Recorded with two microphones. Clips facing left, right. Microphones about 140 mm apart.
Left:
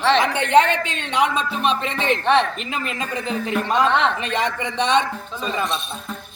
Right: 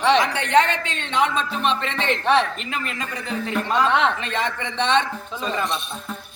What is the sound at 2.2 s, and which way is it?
Speech, 5° right (ahead or behind).